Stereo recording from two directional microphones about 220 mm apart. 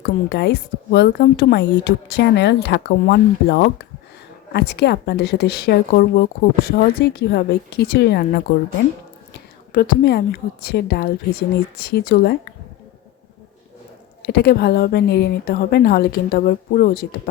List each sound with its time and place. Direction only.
0.0 s speech: 50° left (ahead or behind)
9.7 s speech: 40° left (ahead or behind)
14.2 s speech: 45° left (ahead or behind)